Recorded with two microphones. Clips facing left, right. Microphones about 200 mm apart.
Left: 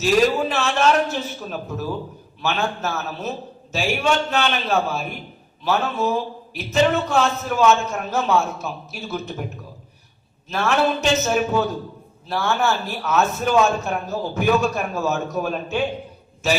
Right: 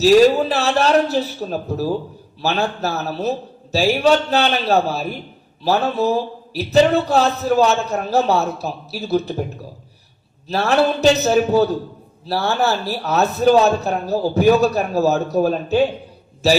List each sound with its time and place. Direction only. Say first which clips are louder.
0.0 s a man's voice: right 6 dB; 35° right (ahead or behind)
10.5 s a man's voice: right 3 dB; 35° right (ahead or behind)